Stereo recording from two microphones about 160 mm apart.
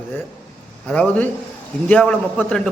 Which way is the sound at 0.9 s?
10° left (ahead or behind).